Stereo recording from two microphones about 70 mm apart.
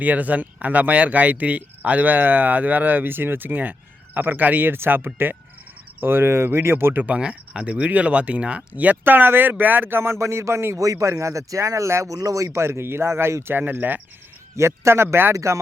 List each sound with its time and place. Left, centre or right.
0.0 s speech: right
7.0 s speech: centre; by 10.8 s right
10.8 s speech: right
12.1 s speech: right
12.5 s speech: right
14.5 s speech: right